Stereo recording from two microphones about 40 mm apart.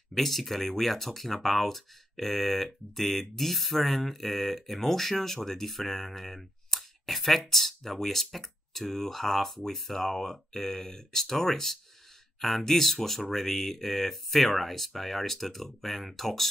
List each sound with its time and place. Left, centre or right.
0.1 s speech: centre